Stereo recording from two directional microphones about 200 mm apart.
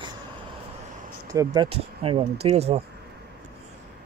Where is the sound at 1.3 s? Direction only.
20° right (ahead or behind).